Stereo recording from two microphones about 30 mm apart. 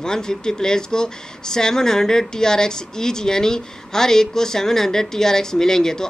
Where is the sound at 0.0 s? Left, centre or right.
Left.